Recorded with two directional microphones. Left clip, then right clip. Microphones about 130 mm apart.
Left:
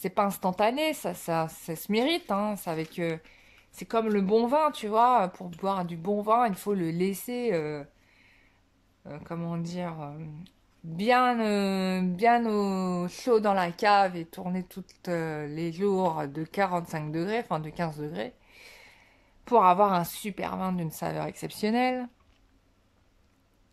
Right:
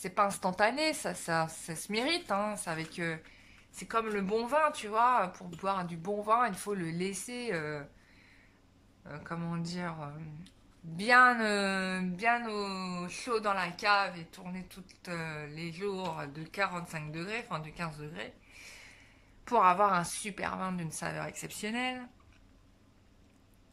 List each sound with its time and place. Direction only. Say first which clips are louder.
0.0 s a woman's voice: left 3 dB; 30° left (ahead or behind)
9.0 s a woman's voice: left 3 dB; 25° left (ahead or behind); by 22.1 s 40° left (ahead or behind)